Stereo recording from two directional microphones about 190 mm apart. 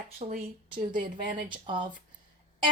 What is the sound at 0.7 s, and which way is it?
Speech, 25° right (ahead or behind).